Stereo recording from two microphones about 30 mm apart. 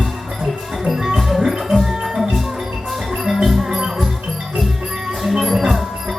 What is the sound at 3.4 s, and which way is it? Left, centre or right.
Music, centre.